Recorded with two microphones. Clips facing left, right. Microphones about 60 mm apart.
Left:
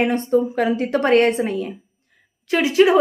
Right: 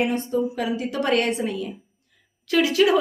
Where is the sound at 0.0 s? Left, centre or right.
Left.